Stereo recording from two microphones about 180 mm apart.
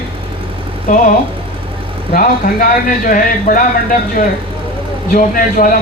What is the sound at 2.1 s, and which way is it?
Speech, 50° left (ahead or behind).